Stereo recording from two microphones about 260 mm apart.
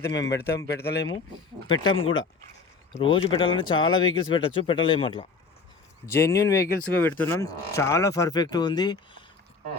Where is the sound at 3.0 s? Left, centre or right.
Centre.